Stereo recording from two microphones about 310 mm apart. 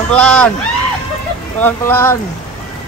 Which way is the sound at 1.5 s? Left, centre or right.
Centre.